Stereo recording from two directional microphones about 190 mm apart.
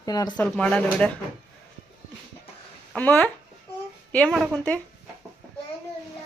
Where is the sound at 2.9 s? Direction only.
10° left (ahead or behind).